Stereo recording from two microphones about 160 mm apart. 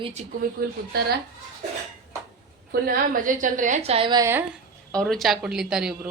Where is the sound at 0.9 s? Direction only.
75° right (ahead or behind).